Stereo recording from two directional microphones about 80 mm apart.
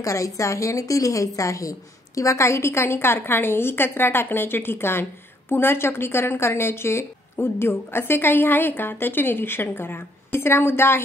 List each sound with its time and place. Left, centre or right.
0.0 s a woman's voice: left